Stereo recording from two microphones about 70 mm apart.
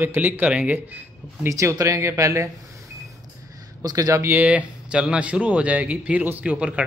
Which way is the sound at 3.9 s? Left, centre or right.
Right.